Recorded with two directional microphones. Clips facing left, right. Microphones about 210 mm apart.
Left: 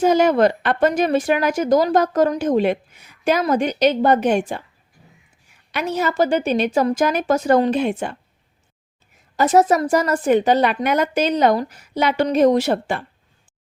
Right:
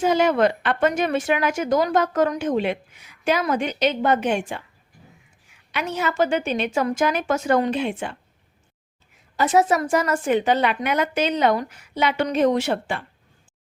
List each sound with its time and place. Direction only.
0.0 s speech: 40° left (ahead or behind)
5.7 s speech: 40° left (ahead or behind)
9.3 s speech: 40° left (ahead or behind)